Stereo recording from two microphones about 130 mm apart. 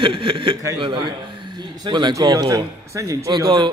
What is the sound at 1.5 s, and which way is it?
Speech, 35° right (ahead or behind).